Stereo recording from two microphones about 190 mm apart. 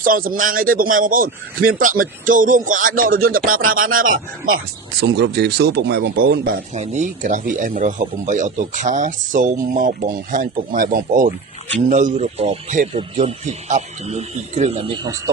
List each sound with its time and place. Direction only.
0.0 s speech: 45° right (ahead or behind)
4.4 s speech: 80° right; by 6.5 s 55° right (ahead or behind)
6.7 s a man's voice: 35° right (ahead or behind)